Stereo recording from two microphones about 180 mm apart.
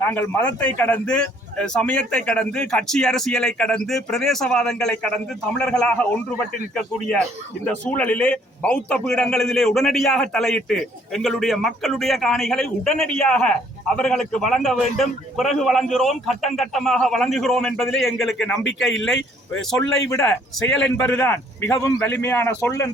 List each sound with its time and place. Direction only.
0.0 s a man's voice: 10° left (ahead or behind)
20.2 s a man's voice: 5° left (ahead or behind)